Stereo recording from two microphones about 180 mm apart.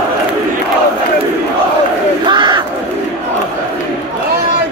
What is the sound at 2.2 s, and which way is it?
Battle cry, 25° right (ahead or behind).